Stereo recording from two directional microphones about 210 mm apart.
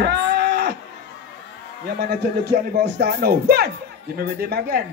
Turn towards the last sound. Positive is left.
turn(degrees=-50)  # may be behind; listen again after turning